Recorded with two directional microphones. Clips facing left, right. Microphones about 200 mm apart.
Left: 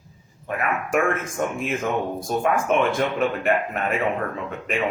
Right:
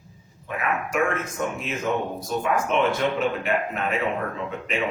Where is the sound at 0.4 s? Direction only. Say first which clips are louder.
Left 1 dB; 50° left (ahead or behind).